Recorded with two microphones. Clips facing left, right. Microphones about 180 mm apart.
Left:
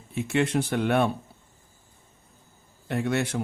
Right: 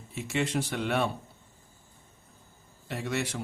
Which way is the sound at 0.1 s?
55° left (ahead or behind).